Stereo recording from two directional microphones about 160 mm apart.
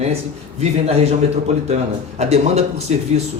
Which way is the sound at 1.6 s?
45° right (ahead or behind).